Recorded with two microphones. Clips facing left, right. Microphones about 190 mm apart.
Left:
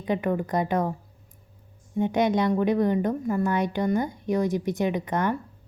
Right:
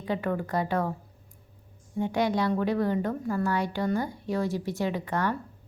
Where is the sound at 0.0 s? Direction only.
20° left (ahead or behind).